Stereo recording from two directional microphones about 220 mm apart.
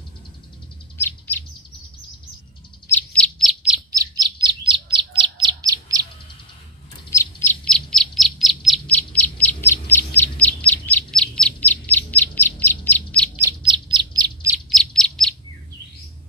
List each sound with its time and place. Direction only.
0.9 s bird: 10° left (ahead or behind)
2.9 s bird: 5° left (ahead or behind)
4.2 s bird: 20° right (ahead or behind)
7.1 s bird: 10° left (ahead or behind)
13.4 s bird: 20° right (ahead or behind)
14.5 s bird: centre (ahead or behind)